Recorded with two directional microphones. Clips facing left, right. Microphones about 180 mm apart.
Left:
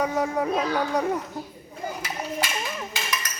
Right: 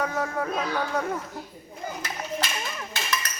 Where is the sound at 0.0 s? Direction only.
15° left (ahead or behind).